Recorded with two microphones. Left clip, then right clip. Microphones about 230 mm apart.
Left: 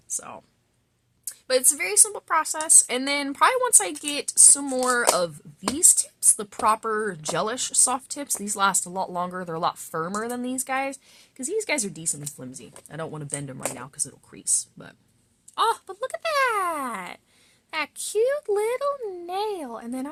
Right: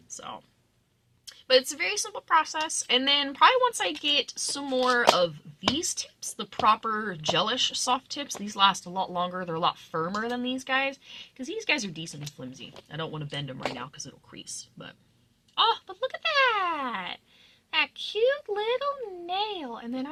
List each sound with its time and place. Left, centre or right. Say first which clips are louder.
0.2 s a woman's voice: even; left
1.5 s a woman's voice: left 1 dB; left
15.5 s a sound: left 1 dB; left
17.7 s a child's voice: left 1 dB; left